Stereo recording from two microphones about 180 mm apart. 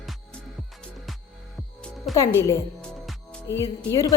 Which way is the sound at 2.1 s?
Centre (ahead or behind).